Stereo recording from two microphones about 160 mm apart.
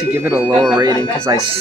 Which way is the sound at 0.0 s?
10° right (ahead or behind).